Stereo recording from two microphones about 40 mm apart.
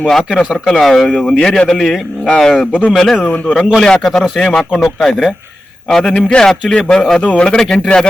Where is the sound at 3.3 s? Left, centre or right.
Left.